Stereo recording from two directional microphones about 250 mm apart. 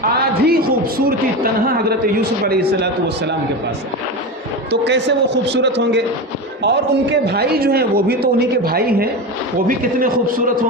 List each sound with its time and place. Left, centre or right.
0.0 s a man's voice: right
4.7 s a man's voice: right